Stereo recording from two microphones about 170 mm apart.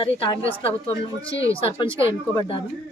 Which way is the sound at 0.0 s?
30° left (ahead or behind).